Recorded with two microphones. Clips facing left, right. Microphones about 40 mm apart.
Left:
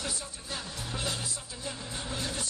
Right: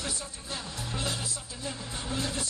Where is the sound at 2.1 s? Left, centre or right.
Right.